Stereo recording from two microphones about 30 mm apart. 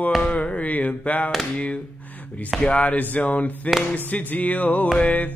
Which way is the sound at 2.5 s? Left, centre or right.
Centre.